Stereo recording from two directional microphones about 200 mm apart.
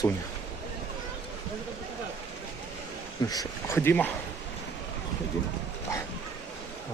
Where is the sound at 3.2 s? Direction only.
20° left (ahead or behind).